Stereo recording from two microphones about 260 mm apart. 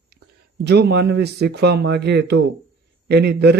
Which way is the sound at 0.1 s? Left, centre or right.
Right.